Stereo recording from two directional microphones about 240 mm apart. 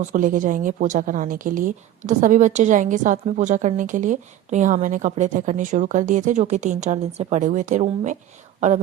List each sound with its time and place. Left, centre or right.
0.0 s a woman's voice: right